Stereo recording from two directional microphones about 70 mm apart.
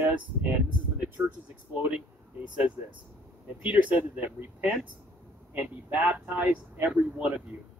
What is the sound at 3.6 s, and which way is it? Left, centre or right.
Speech, centre.